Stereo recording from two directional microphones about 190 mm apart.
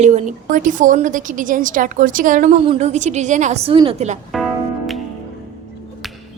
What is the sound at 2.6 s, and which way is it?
A woman's voice, 30° right (ahead or behind).